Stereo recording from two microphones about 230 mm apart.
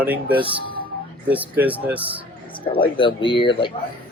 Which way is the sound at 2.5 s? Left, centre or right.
Left.